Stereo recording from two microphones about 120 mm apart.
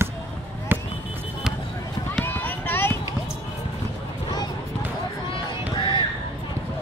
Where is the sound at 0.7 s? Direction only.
15° right (ahead or behind).